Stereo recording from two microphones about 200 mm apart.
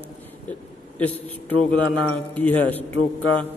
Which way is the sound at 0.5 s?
5° left (ahead or behind).